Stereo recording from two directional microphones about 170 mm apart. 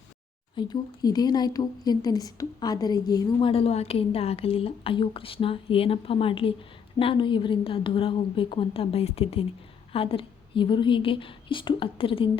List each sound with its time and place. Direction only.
0.5 s speech: 25° left (ahead or behind)